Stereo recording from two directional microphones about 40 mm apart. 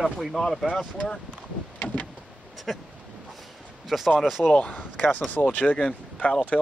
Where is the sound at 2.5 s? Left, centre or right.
Centre.